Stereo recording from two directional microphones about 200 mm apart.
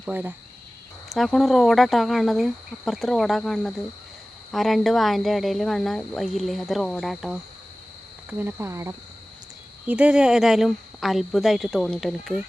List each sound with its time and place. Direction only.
0.0 s speech: 10° right (ahead or behind)